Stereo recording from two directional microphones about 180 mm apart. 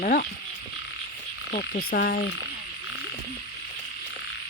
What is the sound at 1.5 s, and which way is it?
Frog, 50° left (ahead or behind).